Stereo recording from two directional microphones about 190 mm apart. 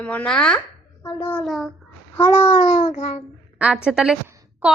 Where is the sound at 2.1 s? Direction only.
15° left (ahead or behind).